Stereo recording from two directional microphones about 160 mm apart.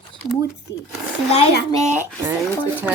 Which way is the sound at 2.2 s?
15° right (ahead or behind).